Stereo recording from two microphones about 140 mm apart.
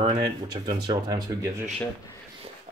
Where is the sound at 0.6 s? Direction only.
30° right (ahead or behind).